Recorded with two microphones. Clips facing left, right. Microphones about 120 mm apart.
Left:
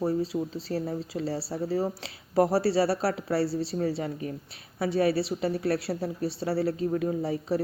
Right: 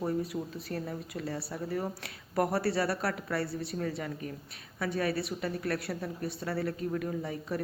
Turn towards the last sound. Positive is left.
turn(degrees=30)  # may be behind; listen again after turning